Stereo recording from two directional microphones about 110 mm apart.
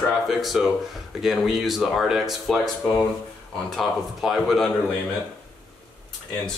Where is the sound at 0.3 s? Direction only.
Centre (ahead or behind).